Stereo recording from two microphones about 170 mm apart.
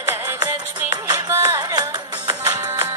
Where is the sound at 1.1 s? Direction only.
25° right (ahead or behind).